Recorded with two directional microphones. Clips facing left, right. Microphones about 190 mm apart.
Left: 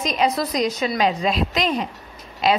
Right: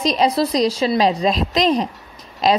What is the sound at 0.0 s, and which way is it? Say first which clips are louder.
A woman's voice: right 4 dB; 35° right (ahead or behind).